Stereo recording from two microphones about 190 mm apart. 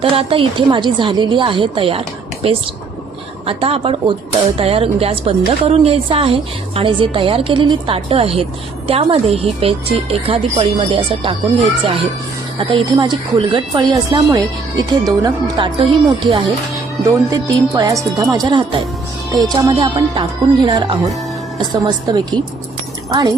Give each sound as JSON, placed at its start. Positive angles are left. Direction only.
{"t": 0.0, "sound": "a woman's voice", "side_deg": -30}
{"t": 12.5, "sound": "a woman's voice", "side_deg": -25}
{"t": 21.8, "sound": "a woman's voice", "side_deg": -20}